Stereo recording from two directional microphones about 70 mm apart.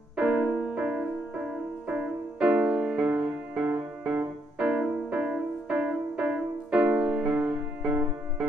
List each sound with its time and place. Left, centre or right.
0.1 s music: centre